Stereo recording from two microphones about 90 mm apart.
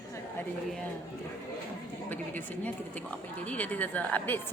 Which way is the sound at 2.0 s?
20° left (ahead or behind).